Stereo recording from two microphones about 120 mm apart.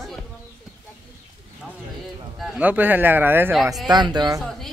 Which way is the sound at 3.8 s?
35° right (ahead or behind).